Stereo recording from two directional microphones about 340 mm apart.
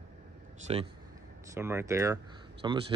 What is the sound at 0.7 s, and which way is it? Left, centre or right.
Speech, centre.